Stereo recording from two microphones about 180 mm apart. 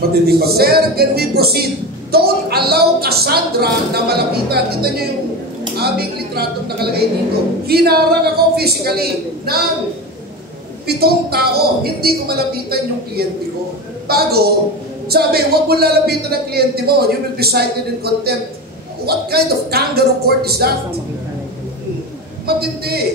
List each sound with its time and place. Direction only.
0.3 s a man's voice: 60° right (ahead or behind)
10.9 s a man's voice: 60° right (ahead or behind)
22.5 s a man's voice: 60° right (ahead or behind)